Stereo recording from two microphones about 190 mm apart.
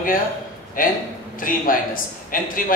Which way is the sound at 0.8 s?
45° left (ahead or behind).